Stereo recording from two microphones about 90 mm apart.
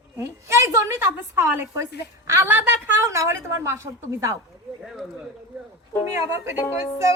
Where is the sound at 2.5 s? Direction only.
20° right (ahead or behind).